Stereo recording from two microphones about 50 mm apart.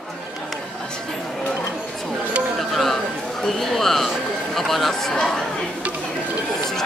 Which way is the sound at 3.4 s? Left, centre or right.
Centre.